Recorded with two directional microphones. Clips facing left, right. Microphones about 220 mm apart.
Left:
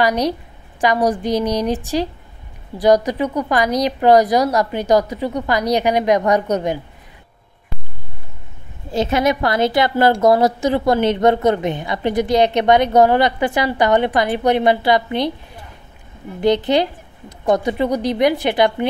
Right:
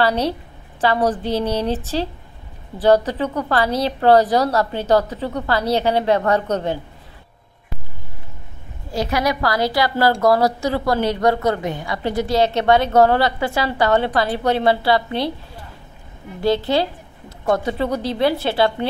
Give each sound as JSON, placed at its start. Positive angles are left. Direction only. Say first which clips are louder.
{"t": 0.0, "sound": "a woman's voice", "louder": "left 1 dB", "side_deg": 15}
{"t": 8.9, "sound": "a woman's voice", "louder": "left 4 dB", "side_deg": 25}
{"t": 16.3, "sound": "a woman's voice", "louder": "left 3 dB", "side_deg": 20}